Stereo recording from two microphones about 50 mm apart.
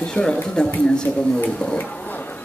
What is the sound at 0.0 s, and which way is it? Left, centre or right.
Speech, centre.